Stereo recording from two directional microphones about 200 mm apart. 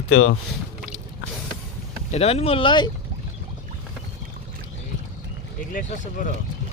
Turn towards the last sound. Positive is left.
turn(degrees=40)  # may be behind; listen again after turning